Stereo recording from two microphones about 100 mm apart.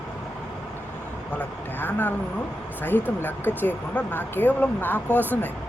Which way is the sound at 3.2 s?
20° left (ahead or behind).